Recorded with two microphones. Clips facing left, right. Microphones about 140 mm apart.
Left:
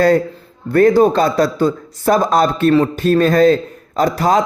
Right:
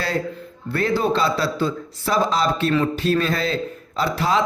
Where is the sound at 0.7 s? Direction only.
45° left (ahead or behind).